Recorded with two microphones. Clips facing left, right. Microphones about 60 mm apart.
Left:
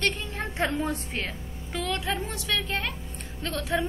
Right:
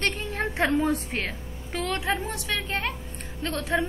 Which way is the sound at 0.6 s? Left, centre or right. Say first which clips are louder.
Right 6 dB; right.